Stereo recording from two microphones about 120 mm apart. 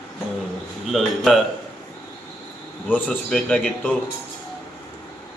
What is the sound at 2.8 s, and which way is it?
A man's voice, 15° left (ahead or behind).